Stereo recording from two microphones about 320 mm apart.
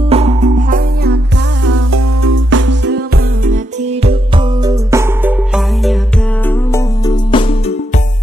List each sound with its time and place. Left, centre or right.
0.1 s music: centre
1.7 s music: right
4.6 s music: centre
6.7 s music: centre